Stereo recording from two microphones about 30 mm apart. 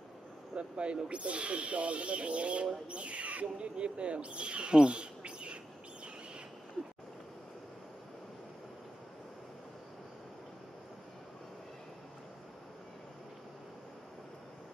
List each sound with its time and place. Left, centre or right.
0.6 s speech: right